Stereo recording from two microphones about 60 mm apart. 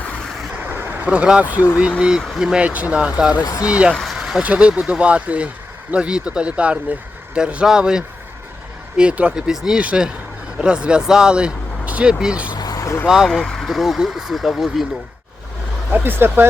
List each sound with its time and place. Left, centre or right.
1.0 s speech: centre
2.0 s speech: centre
2.6 s speech: right
3.4 s speech: left
3.7 s speech: centre
4.0 s vehicle: centre
4.4 s speech: centre
9.5 s speech: centre
9.8 s speech: centre
12.6 s vehicle: left
13.1 s speech: centre
15.9 s speech: right